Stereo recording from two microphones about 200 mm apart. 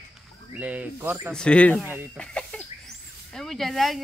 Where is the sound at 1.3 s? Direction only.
5° left (ahead or behind).